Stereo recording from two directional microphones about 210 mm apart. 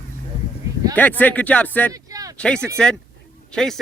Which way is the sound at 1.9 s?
15° right (ahead or behind).